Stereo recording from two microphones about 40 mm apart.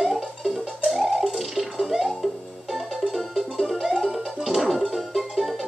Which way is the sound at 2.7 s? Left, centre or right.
Centre.